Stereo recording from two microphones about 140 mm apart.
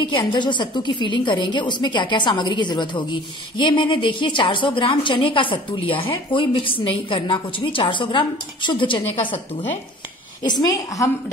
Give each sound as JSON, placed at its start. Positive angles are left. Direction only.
{"t": 0.0, "sound": "a woman's voice", "side_deg": 35}
{"t": 10.4, "sound": "a woman's voice", "side_deg": 30}